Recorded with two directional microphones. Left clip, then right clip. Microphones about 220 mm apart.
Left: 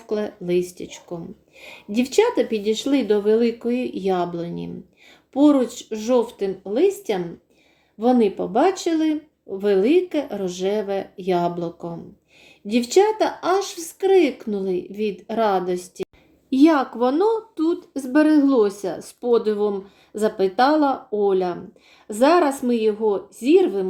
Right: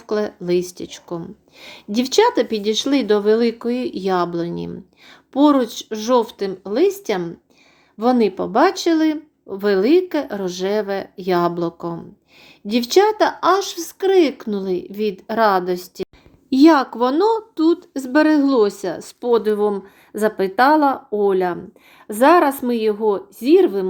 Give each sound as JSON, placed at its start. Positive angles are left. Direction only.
{"t": 0.1, "sound": "a woman's voice", "side_deg": -20}